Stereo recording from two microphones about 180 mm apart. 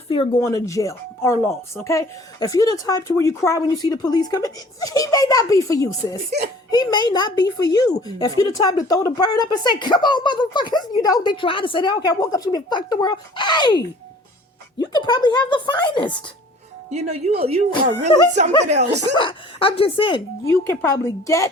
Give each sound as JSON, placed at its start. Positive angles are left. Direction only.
{"t": 0.1, "sound": "speech", "side_deg": 30}
{"t": 0.4, "sound": "speech", "side_deg": 15}
{"t": 16.9, "sound": "speech", "side_deg": -35}
{"t": 19.1, "sound": "speech", "side_deg": 30}
{"t": 20.4, "sound": "speech", "side_deg": 15}